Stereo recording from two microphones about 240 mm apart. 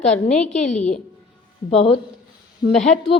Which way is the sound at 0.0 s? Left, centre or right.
Centre.